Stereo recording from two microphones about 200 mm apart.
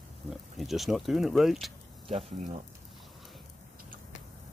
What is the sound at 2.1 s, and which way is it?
Speech, 35° right (ahead or behind).